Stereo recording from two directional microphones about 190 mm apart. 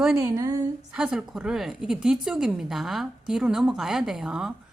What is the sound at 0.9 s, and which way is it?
A woman's voice, 5° right (ahead or behind).